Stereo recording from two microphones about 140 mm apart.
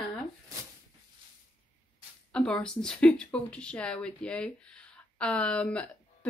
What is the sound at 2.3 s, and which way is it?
A woman's voice, 5° left (ahead or behind).